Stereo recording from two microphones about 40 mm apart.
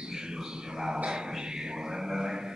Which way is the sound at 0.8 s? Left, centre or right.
Right.